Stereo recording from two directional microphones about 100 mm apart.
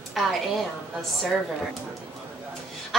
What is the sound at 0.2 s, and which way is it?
Speech, centre (ahead or behind).